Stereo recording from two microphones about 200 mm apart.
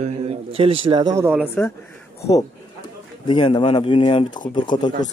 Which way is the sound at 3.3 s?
25° left (ahead or behind).